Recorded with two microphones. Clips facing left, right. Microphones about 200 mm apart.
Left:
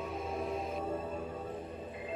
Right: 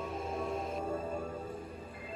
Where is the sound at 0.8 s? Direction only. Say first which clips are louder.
Right 1 dB; 10° right (ahead or behind).